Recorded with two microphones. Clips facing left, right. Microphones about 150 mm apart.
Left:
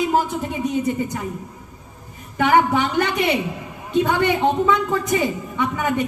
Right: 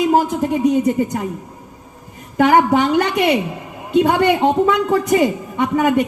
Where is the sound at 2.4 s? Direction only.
40° right (ahead or behind).